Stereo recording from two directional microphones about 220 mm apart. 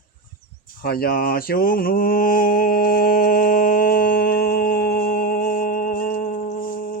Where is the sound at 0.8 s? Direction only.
45° left (ahead or behind).